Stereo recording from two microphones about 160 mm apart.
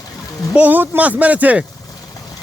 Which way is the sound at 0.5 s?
10° right (ahead or behind).